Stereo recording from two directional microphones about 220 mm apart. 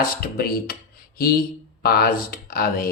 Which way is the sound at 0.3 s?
40° left (ahead or behind).